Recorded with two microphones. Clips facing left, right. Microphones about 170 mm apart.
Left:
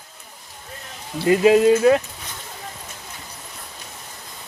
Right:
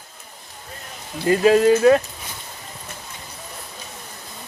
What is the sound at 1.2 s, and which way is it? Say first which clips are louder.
Speech: left 1 dB; 15° left (ahead or behind).